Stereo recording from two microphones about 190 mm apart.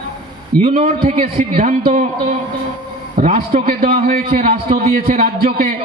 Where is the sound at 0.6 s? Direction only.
35° right (ahead or behind).